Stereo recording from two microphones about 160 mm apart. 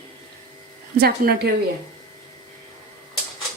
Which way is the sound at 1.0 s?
75° right (ahead or behind).